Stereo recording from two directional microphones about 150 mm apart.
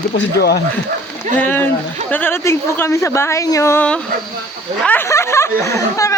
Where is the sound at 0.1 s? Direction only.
90° left.